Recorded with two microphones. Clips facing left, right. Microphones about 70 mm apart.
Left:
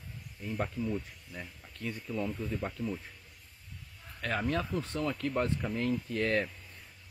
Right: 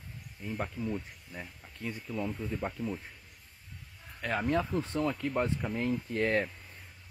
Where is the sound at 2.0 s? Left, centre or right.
Centre.